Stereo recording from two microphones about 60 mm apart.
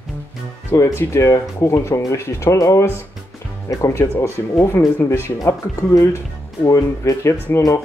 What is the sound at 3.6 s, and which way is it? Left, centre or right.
Speech, left.